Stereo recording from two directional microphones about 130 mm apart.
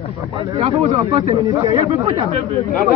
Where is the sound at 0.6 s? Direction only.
55° right (ahead or behind).